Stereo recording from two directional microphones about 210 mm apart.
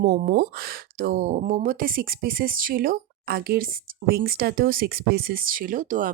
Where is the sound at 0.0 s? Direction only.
40° right (ahead or behind).